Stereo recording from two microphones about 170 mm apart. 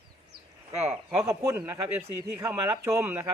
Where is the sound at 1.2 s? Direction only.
15° right (ahead or behind).